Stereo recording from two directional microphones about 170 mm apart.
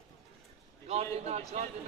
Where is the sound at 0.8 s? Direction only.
40° right (ahead or behind).